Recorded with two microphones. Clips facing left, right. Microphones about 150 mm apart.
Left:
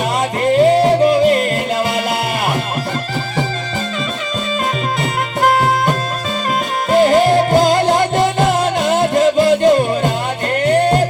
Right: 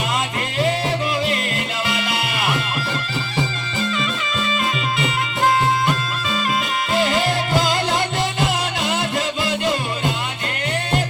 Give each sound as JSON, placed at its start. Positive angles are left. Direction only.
{"t": 0.6, "sound": "music", "side_deg": 45}
{"t": 5.5, "sound": "music", "side_deg": 45}